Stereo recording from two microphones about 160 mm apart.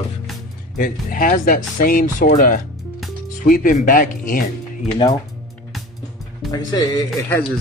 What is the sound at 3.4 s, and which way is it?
Speech, 60° left (ahead or behind).